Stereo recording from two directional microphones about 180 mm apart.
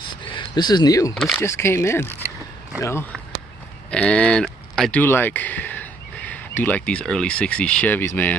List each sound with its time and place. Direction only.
0.3 s speech: 25° left (ahead or behind)
1.1 s speech: centre (ahead or behind)
1.4 s speech: 15° left (ahead or behind)
3.9 s speech: 5° left (ahead or behind)